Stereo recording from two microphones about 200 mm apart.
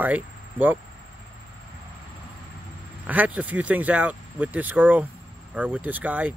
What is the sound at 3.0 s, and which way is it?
Speech, 10° right (ahead or behind).